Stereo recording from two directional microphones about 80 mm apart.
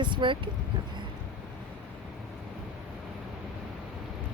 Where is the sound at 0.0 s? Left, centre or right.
Right.